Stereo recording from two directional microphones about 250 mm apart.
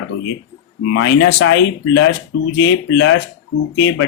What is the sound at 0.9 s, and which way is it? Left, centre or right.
Speech, left.